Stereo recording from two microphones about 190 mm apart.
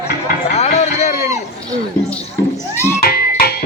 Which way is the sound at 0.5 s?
35° left (ahead or behind).